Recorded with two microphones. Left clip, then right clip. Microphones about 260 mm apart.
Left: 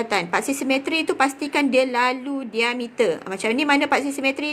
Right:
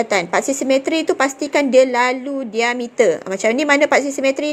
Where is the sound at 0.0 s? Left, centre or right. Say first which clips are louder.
Right 5 dB; centre.